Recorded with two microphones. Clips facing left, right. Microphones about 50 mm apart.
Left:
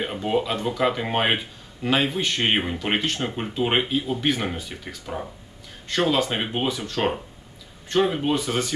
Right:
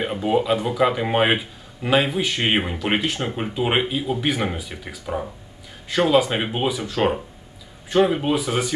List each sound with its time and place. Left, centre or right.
0.0 s speech: centre